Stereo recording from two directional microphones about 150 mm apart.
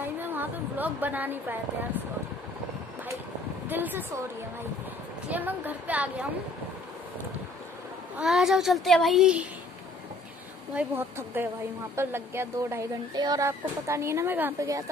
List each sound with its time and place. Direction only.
0.0 s a woman's voice: 15° right (ahead or behind)
3.6 s a woman's voice: 15° right (ahead or behind)
5.3 s a woman's voice: 10° right (ahead or behind)
8.2 s a child's voice: 5° right (ahead or behind)
10.7 s a woman's voice: 10° right (ahead or behind)